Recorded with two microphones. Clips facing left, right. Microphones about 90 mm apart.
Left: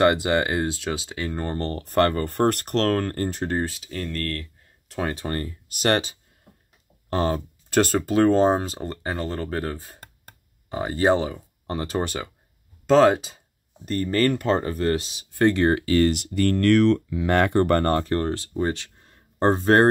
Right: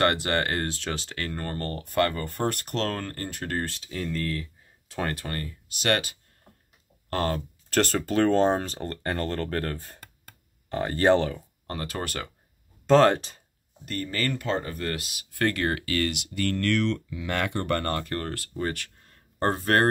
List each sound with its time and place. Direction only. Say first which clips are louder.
0.0 s speech: left 5 dB; 15° left (ahead or behind)
1.9 s speech: left 5 dB; 40° left (ahead or behind)
3.2 s speech: left 7 dB; 30° left (ahead or behind)
3.5 s speech: left 4 dB; 10° left (ahead or behind)
5.1 s speech: left 5 dB; 25° left (ahead or behind)
5.7 s speech: left 4 dB; 40° left (ahead or behind)
7.1 s speech: left 4 dB; 20° left (ahead or behind)
11.3 s speech: left 5 dB; 20° left (ahead or behind)
12.8 s speech: left 2 dB; 5° left (ahead or behind)
13.8 s speech: left 8 dB; 35° left (ahead or behind)
16.2 s speech: left 6 dB; 40° left (ahead or behind); by 19.9 s 25° left (ahead or behind)